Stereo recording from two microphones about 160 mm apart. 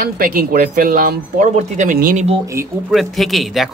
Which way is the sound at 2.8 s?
Centre (ahead or behind).